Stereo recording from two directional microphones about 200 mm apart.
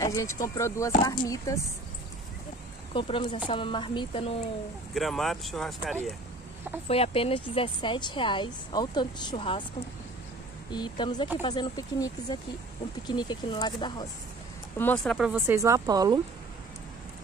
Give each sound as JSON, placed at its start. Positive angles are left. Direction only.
{"t": 0.0, "sound": "speech", "side_deg": 15}
{"t": 2.9, "sound": "speech", "side_deg": 25}
{"t": 4.9, "sound": "speech", "side_deg": 0}
{"t": 6.9, "sound": "speech", "side_deg": 30}
{"t": 10.7, "sound": "speech", "side_deg": 20}
{"t": 14.8, "sound": "speech", "side_deg": 10}
{"t": 15.1, "sound": "speech", "side_deg": -5}